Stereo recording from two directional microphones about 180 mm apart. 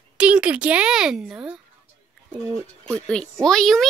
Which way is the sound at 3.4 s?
Centre (ahead or behind).